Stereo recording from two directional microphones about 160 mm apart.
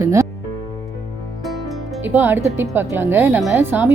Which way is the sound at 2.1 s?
15° right (ahead or behind).